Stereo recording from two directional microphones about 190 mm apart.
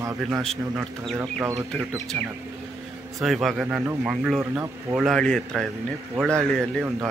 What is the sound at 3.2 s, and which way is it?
A man's voice, centre (ahead or behind).